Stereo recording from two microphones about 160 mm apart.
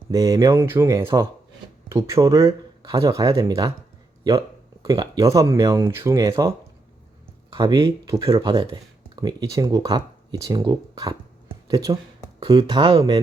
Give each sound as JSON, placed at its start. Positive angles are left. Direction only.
{"t": 0.1, "sound": "speech", "side_deg": -20}
{"t": 4.8, "sound": "speech", "side_deg": -25}
{"t": 7.5, "sound": "speech", "side_deg": -30}